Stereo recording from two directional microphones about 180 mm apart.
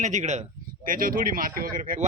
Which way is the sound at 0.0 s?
40° right (ahead or behind).